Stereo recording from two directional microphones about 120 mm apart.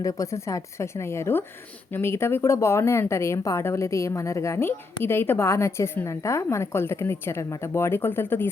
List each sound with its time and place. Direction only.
0.0 s speech: 30° left (ahead or behind)